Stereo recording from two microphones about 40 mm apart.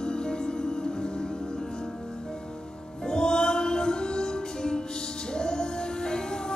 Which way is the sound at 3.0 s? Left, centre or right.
Left.